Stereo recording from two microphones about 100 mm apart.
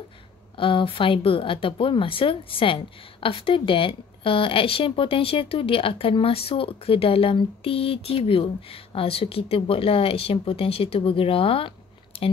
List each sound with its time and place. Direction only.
0.6 s a woman's voice: 60° left (ahead or behind)